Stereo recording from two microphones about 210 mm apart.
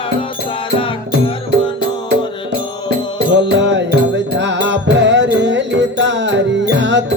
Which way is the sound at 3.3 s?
60° right (ahead or behind).